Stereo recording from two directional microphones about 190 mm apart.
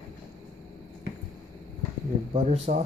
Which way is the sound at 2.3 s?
35° right (ahead or behind).